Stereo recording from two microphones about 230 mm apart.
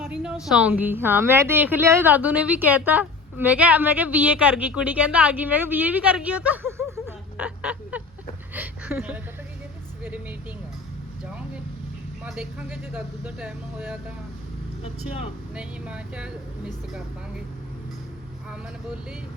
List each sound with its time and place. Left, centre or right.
0.0 s a sound: centre
0.4 s a woman's voice: centre
10.0 s vehicle: centre
12.2 s speech: centre
15.0 s speech: left
15.5 s speech: centre